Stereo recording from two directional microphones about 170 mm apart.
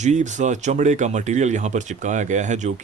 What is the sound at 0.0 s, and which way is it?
Speech, 45° right (ahead or behind).